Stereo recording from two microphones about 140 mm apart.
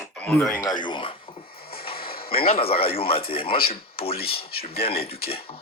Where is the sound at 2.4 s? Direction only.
45° left (ahead or behind).